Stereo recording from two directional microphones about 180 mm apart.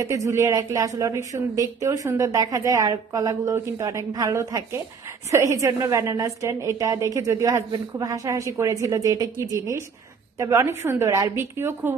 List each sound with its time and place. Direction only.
0.0 s speech: 15° right (ahead or behind)